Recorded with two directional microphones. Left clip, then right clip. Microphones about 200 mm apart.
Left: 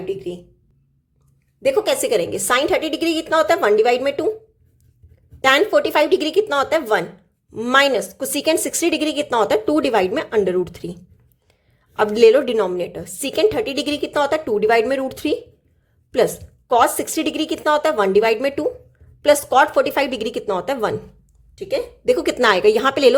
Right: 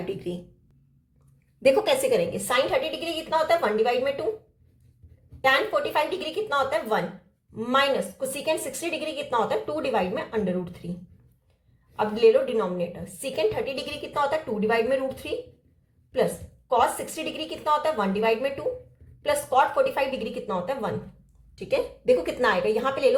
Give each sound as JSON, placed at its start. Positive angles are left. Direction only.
{"t": 0.1, "sound": "a sound", "side_deg": 15}
{"t": 1.6, "sound": "a woman's voice", "side_deg": 15}
{"t": 2.0, "sound": "a woman's voice", "side_deg": 45}
{"t": 3.0, "sound": "a woman's voice", "side_deg": 60}
{"t": 5.4, "sound": "a woman's voice", "side_deg": 60}
{"t": 11.9, "sound": "a woman's voice", "side_deg": 60}
{"t": 16.6, "sound": "a woman's voice", "side_deg": 65}
{"t": 21.5, "sound": "a woman's voice", "side_deg": 30}